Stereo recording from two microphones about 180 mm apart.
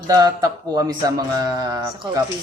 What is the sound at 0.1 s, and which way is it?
A woman's voice, 20° right (ahead or behind).